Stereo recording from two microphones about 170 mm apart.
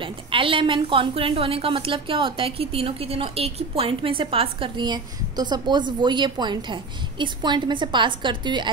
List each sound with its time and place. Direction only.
0.0 s a woman's voice: 30° right (ahead or behind)